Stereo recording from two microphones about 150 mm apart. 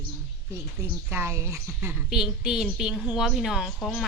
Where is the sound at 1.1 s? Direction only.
15° right (ahead or behind).